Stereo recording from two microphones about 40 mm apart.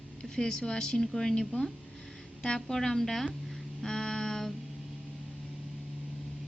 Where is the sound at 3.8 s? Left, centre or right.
Centre.